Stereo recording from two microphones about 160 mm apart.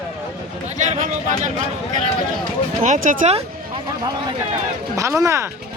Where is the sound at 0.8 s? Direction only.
50° right (ahead or behind).